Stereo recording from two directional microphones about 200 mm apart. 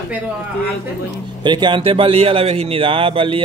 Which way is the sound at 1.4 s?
20° right (ahead or behind).